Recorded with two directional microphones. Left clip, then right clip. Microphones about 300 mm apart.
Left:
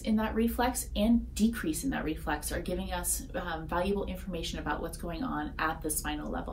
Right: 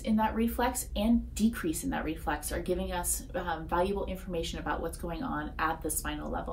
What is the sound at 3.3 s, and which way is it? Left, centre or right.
A woman's voice, centre.